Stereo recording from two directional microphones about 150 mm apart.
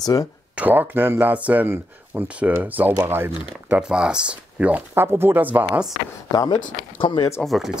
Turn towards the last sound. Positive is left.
turn(degrees=0)  # may be behind; listen again after turning